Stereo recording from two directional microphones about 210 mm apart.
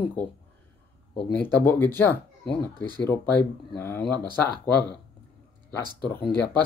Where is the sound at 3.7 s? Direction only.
10° left (ahead or behind).